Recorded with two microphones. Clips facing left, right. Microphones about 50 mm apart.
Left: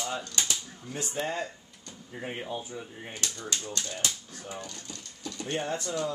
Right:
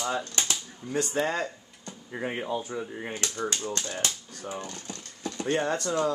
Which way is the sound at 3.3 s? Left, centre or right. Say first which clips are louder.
Right 5 dB; right.